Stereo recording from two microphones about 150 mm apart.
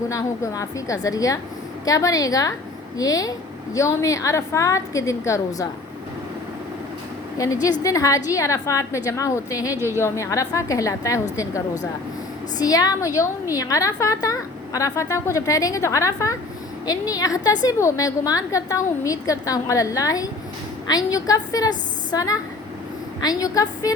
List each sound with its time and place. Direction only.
0.1 s a woman's voice: 20° left (ahead or behind)
7.3 s a woman's voice: 20° left (ahead or behind)